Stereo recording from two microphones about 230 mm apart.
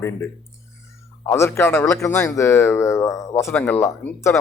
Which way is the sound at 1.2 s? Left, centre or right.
Centre.